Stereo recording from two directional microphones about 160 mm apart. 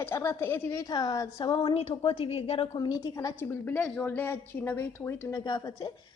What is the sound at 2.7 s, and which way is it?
A woman's voice, 25° left (ahead or behind).